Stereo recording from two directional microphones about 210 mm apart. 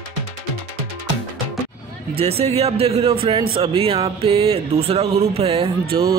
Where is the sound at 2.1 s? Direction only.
30° right (ahead or behind).